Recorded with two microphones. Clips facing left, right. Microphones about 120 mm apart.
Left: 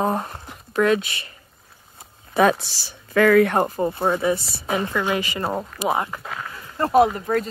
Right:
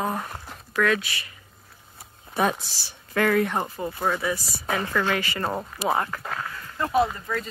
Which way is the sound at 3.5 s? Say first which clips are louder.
Left 7 dB; 45° left (ahead or behind).